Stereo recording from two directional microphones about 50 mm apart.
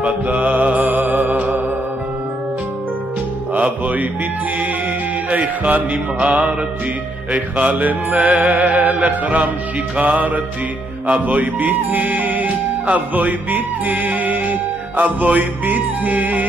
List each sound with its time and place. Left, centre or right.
0.0 s mantra: right
1.3 s music: right
3.5 s music: right